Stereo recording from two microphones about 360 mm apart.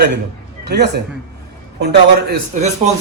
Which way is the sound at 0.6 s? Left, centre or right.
Right.